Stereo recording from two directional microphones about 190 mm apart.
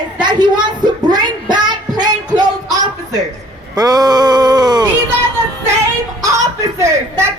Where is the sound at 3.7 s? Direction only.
20° right (ahead or behind).